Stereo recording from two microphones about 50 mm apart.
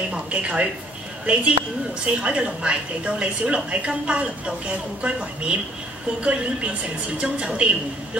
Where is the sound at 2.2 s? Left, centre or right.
Right.